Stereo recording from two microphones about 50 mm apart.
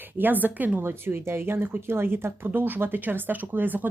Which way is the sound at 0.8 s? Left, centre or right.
Right.